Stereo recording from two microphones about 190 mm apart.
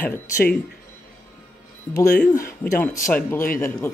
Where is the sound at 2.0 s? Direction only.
15° left (ahead or behind).